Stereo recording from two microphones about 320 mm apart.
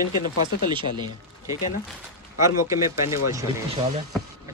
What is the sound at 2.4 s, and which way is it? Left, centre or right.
Speech, centre.